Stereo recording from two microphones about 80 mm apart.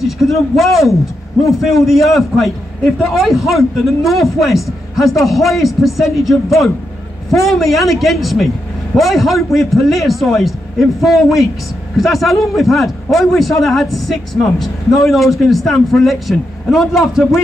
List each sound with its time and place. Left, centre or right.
0.0 s a man's voice: centre